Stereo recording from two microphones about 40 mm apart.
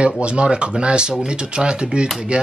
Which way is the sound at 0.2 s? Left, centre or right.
Right.